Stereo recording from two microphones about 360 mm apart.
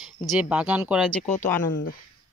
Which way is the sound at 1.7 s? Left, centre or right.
Left.